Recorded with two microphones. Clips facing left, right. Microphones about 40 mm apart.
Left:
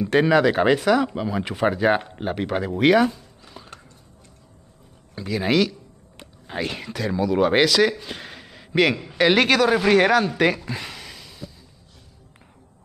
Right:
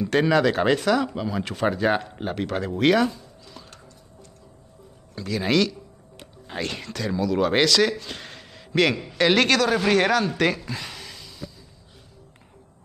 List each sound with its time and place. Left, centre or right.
0.0 s speech: centre
3.6 s music: centre
5.1 s speech: centre